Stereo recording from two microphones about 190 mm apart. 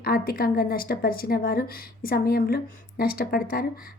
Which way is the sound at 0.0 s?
50° left (ahead or behind).